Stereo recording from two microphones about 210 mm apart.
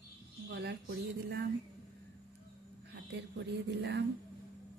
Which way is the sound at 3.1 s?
55° right (ahead or behind).